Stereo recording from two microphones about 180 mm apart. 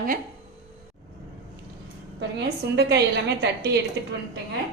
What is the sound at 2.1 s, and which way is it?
A woman's voice, 70° right (ahead or behind).